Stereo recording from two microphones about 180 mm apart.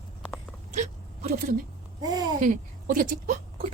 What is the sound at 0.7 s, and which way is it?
Hiccup, 45° right (ahead or behind).